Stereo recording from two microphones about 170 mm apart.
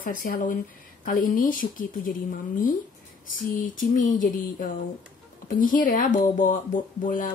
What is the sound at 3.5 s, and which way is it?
Speech, 50° left (ahead or behind).